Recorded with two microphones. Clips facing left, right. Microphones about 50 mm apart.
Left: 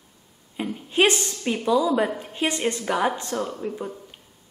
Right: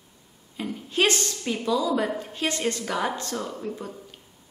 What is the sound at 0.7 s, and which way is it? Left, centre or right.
A woman's voice, left.